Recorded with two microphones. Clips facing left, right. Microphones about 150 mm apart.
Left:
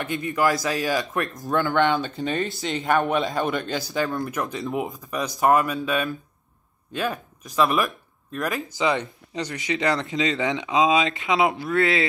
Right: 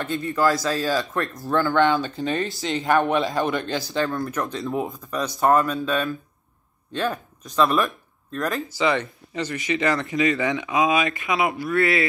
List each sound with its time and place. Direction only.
0.0 s speech: 15° left (ahead or behind)
2.6 s speech: centre (ahead or behind)
3.9 s speech: 15° left (ahead or behind)